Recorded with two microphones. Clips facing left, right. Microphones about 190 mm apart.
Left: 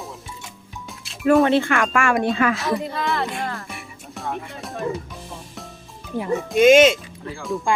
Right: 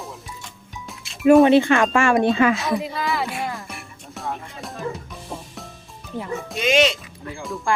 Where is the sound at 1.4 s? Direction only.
15° right (ahead or behind).